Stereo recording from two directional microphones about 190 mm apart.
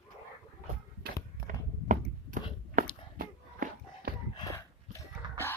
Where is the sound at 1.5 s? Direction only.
45° right (ahead or behind).